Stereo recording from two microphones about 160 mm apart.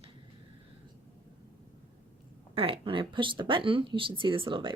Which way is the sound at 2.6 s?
35° right (ahead or behind).